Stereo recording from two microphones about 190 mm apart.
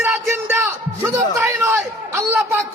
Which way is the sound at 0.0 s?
10° right (ahead or behind).